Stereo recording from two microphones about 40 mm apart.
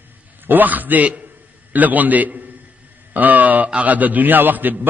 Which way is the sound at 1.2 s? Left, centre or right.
Right.